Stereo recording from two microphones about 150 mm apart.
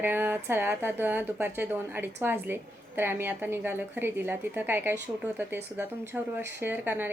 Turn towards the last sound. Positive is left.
turn(degrees=-15)  # may be behind; listen again after turning